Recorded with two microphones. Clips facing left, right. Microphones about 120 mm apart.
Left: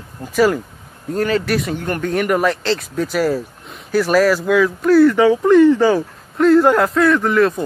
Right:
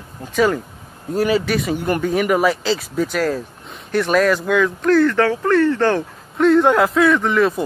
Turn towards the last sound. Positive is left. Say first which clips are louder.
# left 2 dB
turn(degrees=0)  # may be behind; listen again after turning